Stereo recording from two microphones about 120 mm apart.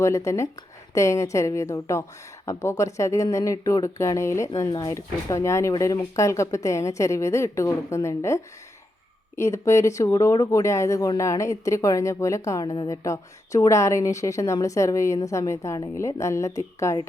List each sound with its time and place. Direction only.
0.9 s speech: 25° left (ahead or behind)